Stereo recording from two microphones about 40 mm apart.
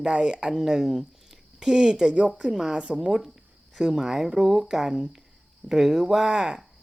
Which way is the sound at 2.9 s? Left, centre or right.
Centre.